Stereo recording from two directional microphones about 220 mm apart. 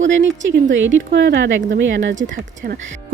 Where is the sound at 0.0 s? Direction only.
55° right (ahead or behind).